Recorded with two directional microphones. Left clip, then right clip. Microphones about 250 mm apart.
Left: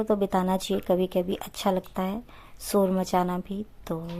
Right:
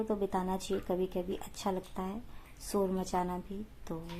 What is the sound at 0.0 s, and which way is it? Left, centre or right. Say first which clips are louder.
Speech: left 9 dB; left.